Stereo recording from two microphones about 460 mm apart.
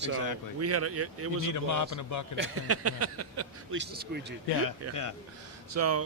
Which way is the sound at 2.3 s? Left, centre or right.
Right.